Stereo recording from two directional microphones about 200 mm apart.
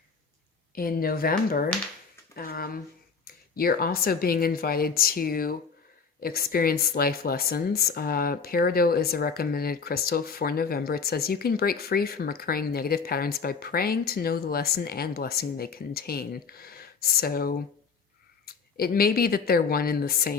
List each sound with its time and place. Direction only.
0.8 s speech: 45° left (ahead or behind)